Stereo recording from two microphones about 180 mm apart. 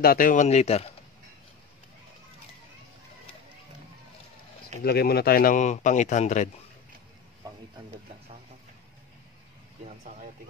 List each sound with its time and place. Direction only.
0.0 s speech: 50° left (ahead or behind); by 0.8 s 35° left (ahead or behind)
4.8 s speech: 60° left (ahead or behind); by 6.5 s 40° left (ahead or behind)